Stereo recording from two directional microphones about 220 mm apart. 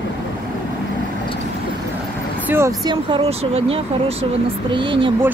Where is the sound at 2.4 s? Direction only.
10° right (ahead or behind).